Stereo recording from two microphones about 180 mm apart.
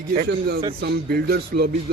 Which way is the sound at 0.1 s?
60° right (ahead or behind).